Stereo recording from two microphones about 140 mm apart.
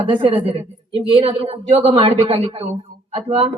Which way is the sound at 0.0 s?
45° right (ahead or behind).